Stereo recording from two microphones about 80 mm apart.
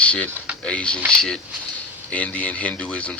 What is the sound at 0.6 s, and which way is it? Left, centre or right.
Speech, centre.